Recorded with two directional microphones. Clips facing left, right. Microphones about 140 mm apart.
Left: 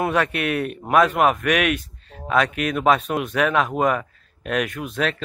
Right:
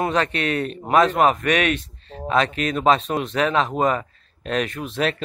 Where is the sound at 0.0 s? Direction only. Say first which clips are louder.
Even; 10° left (ahead or behind).